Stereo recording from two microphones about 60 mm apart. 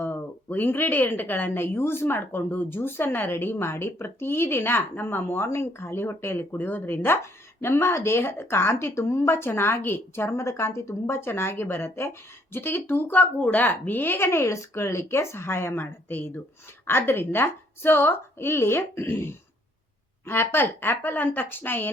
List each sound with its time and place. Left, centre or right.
0.0 s a woman's voice: left